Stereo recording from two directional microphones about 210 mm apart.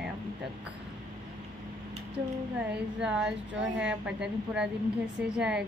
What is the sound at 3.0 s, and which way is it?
Speech, 5° right (ahead or behind).